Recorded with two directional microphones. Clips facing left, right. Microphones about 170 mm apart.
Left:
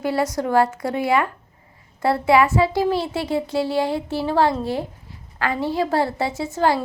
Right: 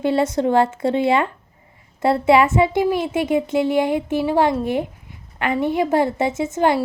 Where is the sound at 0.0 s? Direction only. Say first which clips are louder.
Right 4 dB; 25° right (ahead or behind).